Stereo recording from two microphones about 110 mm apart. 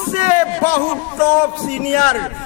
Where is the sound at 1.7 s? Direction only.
85° left.